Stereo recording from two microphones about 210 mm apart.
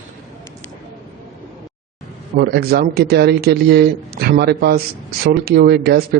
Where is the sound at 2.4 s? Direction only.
50° right (ahead or behind).